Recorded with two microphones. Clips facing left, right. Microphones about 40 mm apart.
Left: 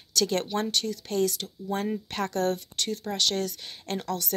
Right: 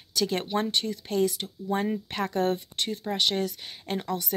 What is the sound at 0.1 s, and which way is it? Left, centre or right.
Speech, centre.